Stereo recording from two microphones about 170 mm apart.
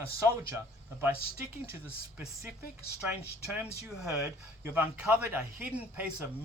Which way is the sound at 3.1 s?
10° right (ahead or behind).